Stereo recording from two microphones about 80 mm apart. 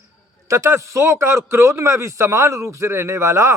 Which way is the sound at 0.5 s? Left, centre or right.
Right.